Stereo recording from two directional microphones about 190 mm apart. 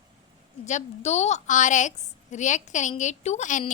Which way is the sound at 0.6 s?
40° left (ahead or behind).